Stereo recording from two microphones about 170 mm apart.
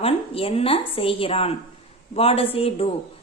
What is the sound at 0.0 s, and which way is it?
A woman's voice, 35° left (ahead or behind).